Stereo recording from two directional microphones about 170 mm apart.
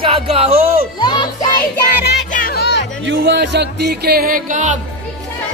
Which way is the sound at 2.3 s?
60° left (ahead or behind).